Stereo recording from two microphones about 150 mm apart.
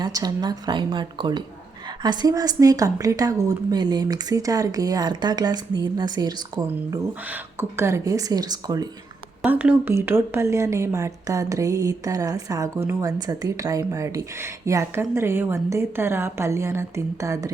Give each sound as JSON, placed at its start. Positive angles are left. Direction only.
{"t": 0.0, "sound": "speech", "side_deg": -25}
{"t": 7.1, "sound": "speech", "side_deg": -15}
{"t": 9.4, "sound": "speech", "side_deg": -10}